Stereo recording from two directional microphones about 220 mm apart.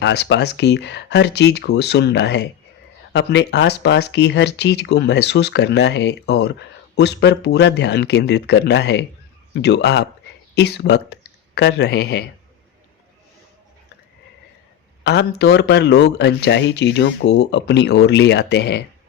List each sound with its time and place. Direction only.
0.0 s speech: 50° left (ahead or behind)
15.0 s speech: 50° left (ahead or behind)